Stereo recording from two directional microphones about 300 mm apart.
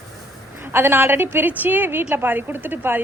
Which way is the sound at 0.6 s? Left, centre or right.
Centre.